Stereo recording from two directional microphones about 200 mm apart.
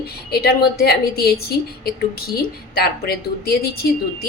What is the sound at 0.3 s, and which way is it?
A woman's voice, 50° left (ahead or behind).